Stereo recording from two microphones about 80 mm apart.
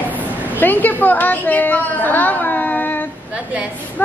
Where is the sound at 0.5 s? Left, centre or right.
Left.